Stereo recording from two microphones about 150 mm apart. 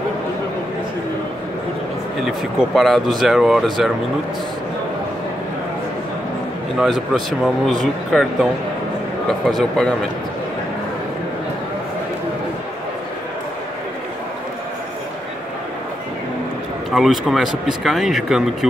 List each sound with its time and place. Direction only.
2.2 s speech: centre (ahead or behind)
6.8 s speech: centre (ahead or behind)
9.5 s speech: centre (ahead or behind)
16.9 s speech: centre (ahead or behind)